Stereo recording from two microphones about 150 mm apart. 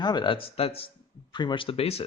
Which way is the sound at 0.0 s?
30° left (ahead or behind).